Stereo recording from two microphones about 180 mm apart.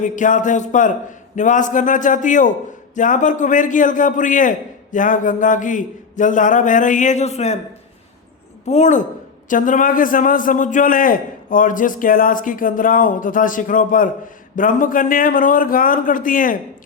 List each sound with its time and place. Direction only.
0.0 s a man's voice: 45° left (ahead or behind)
8.6 s a man's voice: 40° left (ahead or behind)